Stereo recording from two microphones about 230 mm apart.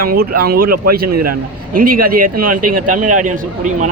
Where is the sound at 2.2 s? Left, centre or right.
Right.